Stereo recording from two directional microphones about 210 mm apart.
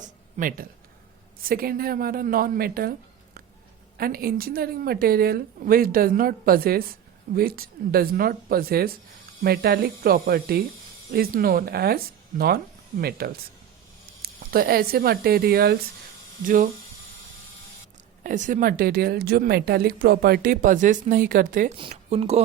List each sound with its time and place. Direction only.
0.0 s a sound: 40° right (ahead or behind)
1.5 s speech: 45° right (ahead or behind)
3.9 s speech: 45° right (ahead or behind)
13.0 s speech: 50° right (ahead or behind)
18.2 s speech: 40° right (ahead or behind)
21.8 s speech: 25° right (ahead or behind)